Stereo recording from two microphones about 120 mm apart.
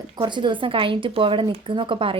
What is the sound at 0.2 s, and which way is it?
A woman's voice, 40° right (ahead or behind).